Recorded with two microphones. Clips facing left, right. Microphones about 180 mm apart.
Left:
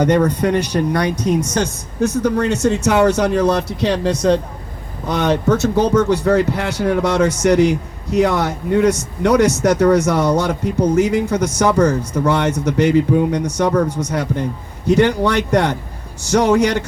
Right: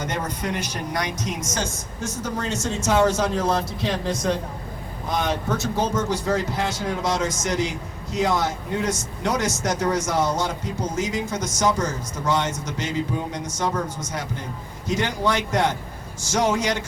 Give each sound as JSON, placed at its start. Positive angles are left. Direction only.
{"t": 0.0, "sound": "a man's voice", "side_deg": 65}